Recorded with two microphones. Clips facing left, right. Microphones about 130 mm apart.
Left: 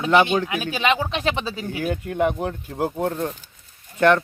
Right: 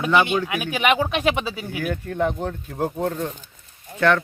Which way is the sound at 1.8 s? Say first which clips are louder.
Left 2 dB; 15° left (ahead or behind).